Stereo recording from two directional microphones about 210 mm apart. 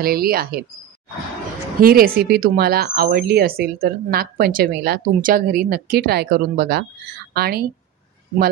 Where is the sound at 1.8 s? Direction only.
45° right (ahead or behind).